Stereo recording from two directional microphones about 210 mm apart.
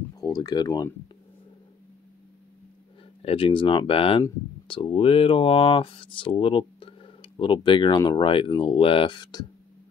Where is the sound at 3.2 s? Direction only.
25° left (ahead or behind).